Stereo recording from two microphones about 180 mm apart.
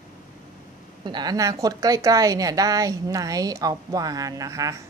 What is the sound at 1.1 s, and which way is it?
A woman's voice, 25° right (ahead or behind).